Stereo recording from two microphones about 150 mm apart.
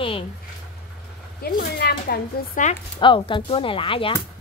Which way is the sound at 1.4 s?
90° left.